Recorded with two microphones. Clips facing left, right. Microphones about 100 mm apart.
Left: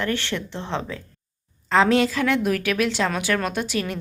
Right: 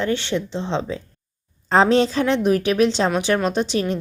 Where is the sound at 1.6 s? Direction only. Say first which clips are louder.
Right 2 dB; 35° right (ahead or behind).